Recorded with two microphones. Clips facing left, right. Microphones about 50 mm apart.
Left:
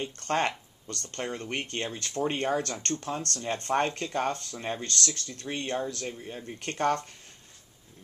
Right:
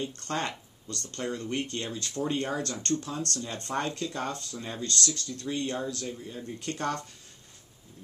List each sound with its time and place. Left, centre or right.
0.0 s speech: left